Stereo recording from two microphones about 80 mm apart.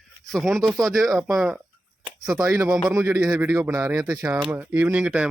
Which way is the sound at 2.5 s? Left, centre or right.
Right.